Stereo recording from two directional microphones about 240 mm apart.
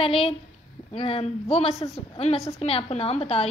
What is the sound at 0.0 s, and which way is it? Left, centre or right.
A woman's voice, left.